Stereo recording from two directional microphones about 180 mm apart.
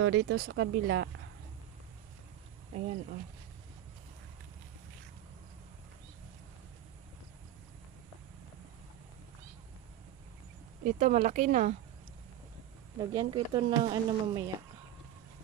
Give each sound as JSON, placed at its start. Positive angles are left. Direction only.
{"t": 0.1, "sound": "speech", "side_deg": -90}
{"t": 2.7, "sound": "speech", "side_deg": -40}
{"t": 10.8, "sound": "speech", "side_deg": -55}
{"t": 13.1, "sound": "a woman's voice", "side_deg": -25}